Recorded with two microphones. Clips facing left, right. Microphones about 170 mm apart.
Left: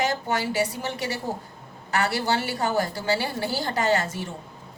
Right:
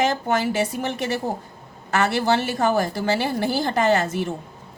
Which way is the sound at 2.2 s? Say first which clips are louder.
Right 5 dB; 50° right (ahead or behind).